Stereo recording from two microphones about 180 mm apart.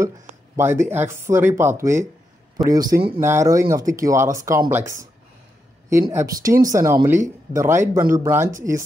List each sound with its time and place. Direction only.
0.6 s a man's voice: 15° right (ahead or behind)